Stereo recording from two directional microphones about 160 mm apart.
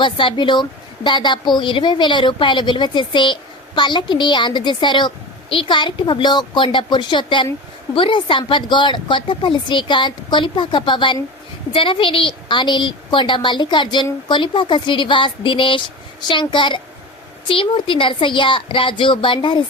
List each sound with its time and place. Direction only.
0.0 s a woman's voice: 30° left (ahead or behind)